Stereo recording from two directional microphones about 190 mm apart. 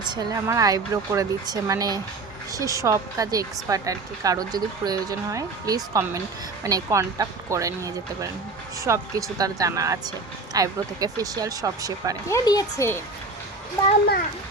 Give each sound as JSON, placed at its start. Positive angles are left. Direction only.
{"t": 0.1, "sound": "speech", "side_deg": -20}
{"t": 12.3, "sound": "speech", "side_deg": 20}